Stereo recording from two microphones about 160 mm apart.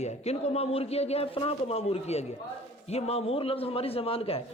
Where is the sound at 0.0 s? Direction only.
45° left (ahead or behind).